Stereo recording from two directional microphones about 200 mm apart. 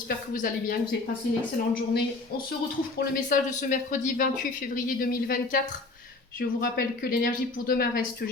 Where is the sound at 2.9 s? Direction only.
45° left (ahead or behind).